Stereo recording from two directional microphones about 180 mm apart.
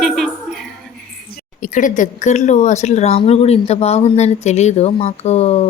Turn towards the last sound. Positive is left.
turn(degrees=35)  # may be behind; listen again after turning